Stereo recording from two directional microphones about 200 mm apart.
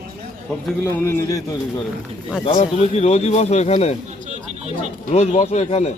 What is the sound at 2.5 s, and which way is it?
Speech, 30° left (ahead or behind).